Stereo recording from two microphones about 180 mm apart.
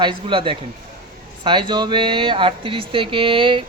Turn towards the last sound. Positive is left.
turn(degrees=-30)  # may be behind; listen again after turning